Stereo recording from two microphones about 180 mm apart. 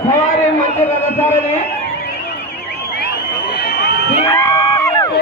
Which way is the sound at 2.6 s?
60° left (ahead or behind).